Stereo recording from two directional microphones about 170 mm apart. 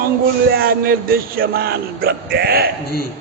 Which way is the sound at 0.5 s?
65° right (ahead or behind).